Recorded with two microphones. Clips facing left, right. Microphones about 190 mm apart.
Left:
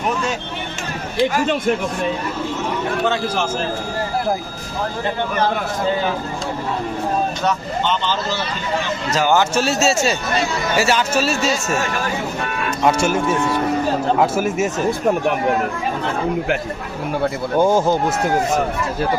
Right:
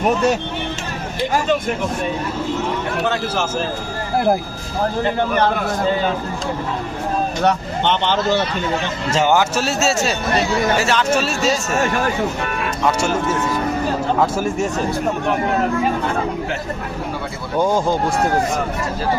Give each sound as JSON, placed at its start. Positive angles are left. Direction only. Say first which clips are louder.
{"t": 7.4, "sound": "speech", "louder": "right 2 dB", "side_deg": -60}
{"t": 9.3, "sound": "a man's voice", "louder": "left 1 dB", "side_deg": -5}
{"t": 14.2, "sound": "speech", "louder": "left 1 dB", "side_deg": 5}
{"t": 17.6, "sound": "speech", "louder": "left 2 dB", "side_deg": 10}